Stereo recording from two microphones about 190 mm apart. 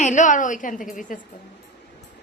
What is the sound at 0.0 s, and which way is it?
A woman's voice, 40° left (ahead or behind).